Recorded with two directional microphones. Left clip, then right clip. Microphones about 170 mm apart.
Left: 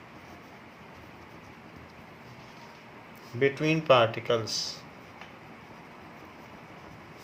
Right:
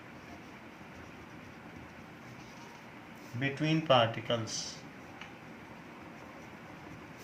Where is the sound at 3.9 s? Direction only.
55° left (ahead or behind).